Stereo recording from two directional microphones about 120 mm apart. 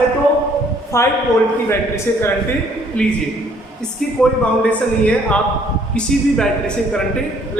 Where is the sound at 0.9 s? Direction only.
25° left (ahead or behind).